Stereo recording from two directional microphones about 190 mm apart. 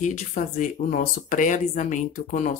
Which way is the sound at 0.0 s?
40° left (ahead or behind).